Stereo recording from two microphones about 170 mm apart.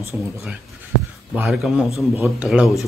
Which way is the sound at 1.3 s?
5° right (ahead or behind).